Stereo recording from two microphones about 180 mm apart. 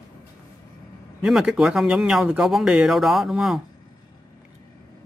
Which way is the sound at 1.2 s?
5° right (ahead or behind).